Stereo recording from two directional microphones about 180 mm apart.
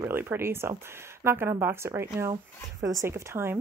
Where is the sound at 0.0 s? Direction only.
15° right (ahead or behind).